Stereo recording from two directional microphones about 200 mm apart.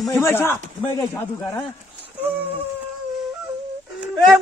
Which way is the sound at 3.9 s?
Centre (ahead or behind).